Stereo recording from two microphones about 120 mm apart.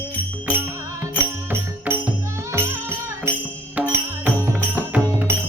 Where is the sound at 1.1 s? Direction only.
20° right (ahead or behind).